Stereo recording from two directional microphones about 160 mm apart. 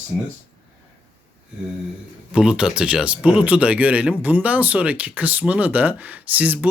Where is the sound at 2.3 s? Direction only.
5° right (ahead or behind).